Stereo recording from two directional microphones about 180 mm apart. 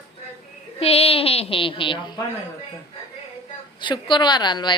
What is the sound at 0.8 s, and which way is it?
A woman's voice, 35° left (ahead or behind).